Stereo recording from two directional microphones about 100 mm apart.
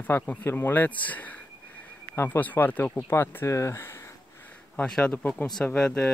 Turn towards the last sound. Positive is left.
turn(degrees=10)  # may be behind; listen again after turning